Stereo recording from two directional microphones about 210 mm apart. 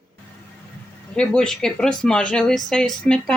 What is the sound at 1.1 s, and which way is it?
Speech, 5° left (ahead or behind).